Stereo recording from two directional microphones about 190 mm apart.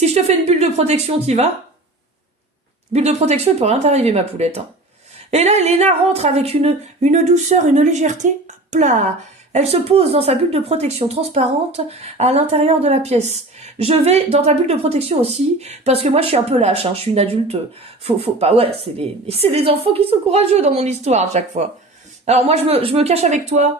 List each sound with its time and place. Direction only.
0.0 s speech: 35° right (ahead or behind)
2.9 s speech: 35° right (ahead or behind)